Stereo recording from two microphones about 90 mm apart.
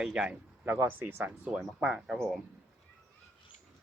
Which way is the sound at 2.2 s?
5° left (ahead or behind).